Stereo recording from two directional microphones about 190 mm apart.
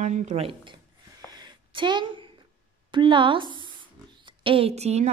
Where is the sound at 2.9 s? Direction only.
25° right (ahead or behind).